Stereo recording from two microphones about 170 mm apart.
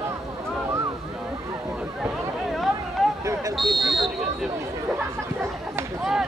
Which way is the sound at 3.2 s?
20° right (ahead or behind).